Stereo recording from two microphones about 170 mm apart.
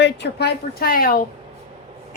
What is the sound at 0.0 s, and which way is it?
A woman's voice, 80° left.